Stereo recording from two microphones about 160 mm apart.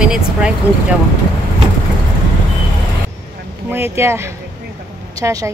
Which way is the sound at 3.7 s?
15° right (ahead or behind).